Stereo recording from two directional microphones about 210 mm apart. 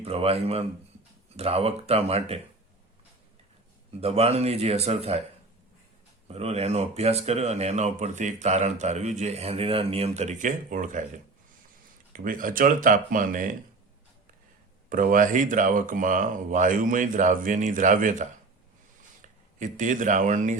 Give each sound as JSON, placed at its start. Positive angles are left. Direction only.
{"t": 0.0, "sound": "speech", "side_deg": -30}
{"t": 4.0, "sound": "speech", "side_deg": -30}
{"t": 6.2, "sound": "speech", "side_deg": -30}
{"t": 12.1, "sound": "speech", "side_deg": -40}
{"t": 14.8, "sound": "speech", "side_deg": -40}